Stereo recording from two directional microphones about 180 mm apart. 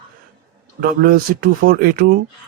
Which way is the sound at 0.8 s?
50° right (ahead or behind).